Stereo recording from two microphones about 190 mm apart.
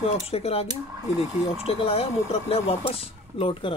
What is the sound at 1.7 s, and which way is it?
Speech, 30° left (ahead or behind).